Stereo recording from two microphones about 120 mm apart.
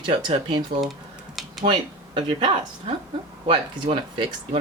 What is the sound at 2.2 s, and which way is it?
Speech, 45° right (ahead or behind).